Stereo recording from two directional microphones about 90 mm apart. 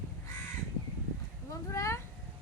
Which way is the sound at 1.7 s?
35° left (ahead or behind).